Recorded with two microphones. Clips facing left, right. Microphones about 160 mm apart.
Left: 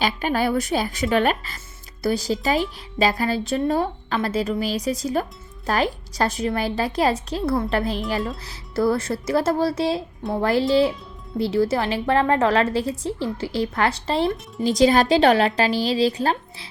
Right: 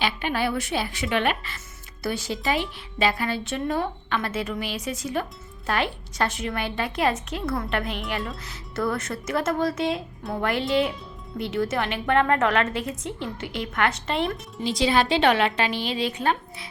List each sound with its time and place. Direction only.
0.0 s a woman's voice: 40° left (ahead or behind)